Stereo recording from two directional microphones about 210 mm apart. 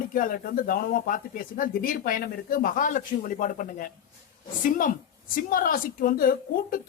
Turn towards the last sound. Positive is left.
turn(degrees=45)  # may be behind; listen again after turning